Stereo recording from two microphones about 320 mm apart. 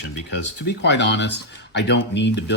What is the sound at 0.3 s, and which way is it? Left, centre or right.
Speech, left.